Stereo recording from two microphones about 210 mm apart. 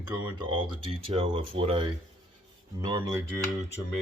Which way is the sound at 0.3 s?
25° right (ahead or behind).